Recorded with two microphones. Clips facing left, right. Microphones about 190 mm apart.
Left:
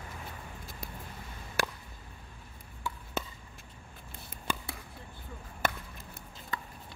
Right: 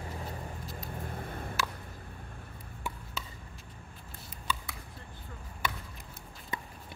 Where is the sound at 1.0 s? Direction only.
55° right (ahead or behind).